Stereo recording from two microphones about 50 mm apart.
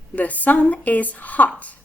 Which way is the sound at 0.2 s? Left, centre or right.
Left.